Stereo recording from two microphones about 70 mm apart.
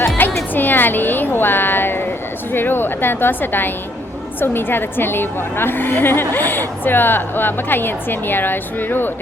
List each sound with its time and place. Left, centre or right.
0.2 s music: left
0.5 s a sound: left
2.5 s a woman's voice: left